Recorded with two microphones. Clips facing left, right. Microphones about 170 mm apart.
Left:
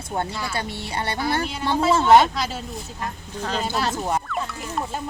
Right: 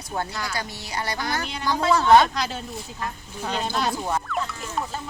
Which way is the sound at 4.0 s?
15° left (ahead or behind).